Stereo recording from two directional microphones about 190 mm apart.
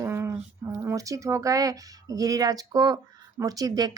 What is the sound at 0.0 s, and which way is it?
Speech, 15° right (ahead or behind).